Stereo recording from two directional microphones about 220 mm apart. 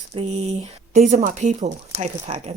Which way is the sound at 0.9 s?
35° right (ahead or behind).